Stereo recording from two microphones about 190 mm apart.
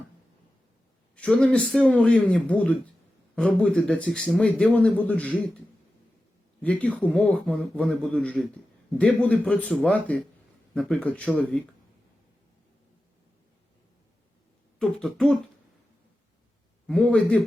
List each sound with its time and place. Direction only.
1.1 s a man's voice: 5° left (ahead or behind)
14.8 s a man's voice: 5° left (ahead or behind)
16.8 s a man's voice: 5° left (ahead or behind)